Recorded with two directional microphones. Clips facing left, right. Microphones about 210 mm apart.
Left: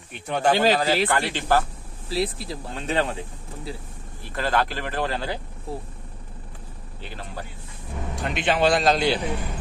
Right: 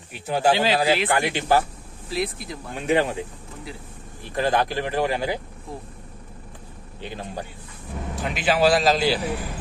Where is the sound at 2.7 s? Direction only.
15° right (ahead or behind).